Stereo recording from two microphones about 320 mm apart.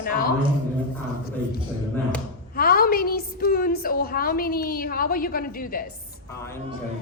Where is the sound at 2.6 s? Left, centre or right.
Left.